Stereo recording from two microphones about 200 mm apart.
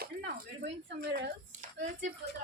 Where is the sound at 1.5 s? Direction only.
35° right (ahead or behind).